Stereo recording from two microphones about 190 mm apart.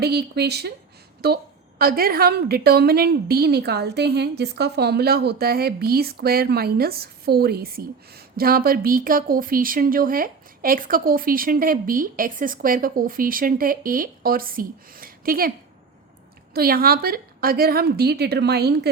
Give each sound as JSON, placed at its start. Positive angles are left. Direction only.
{"t": 0.0, "sound": "a woman's voice", "side_deg": -60}
{"t": 16.6, "sound": "a woman's voice", "side_deg": -50}